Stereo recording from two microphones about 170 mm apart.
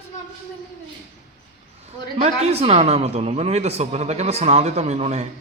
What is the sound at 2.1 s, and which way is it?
A man's voice, 40° right (ahead or behind).